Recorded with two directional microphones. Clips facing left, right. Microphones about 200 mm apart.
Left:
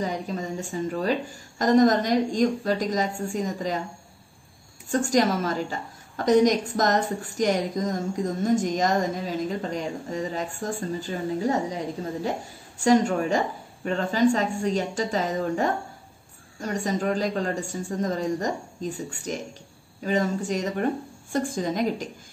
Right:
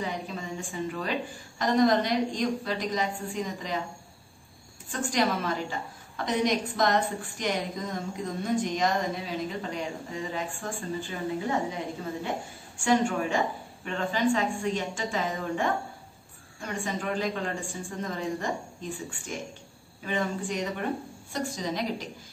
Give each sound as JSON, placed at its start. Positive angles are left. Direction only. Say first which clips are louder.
{"t": 0.0, "sound": "a woman's voice", "louder": "left 5 dB", "side_deg": 40}
{"t": 4.8, "sound": "a woman's voice", "louder": "left 6 dB", "side_deg": 45}